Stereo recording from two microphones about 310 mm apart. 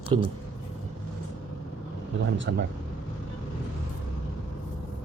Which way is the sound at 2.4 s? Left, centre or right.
Right.